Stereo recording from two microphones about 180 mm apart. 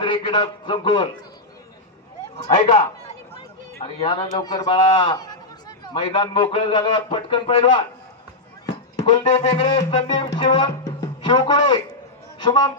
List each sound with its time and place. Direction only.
0.0 s a man's voice: 25° left (ahead or behind)
2.3 s music: 35° left (ahead or behind)
3.3 s a man's voice: 30° left (ahead or behind)
9.0 s music: 35° left (ahead or behind)
9.5 s a man's voice: 30° left (ahead or behind)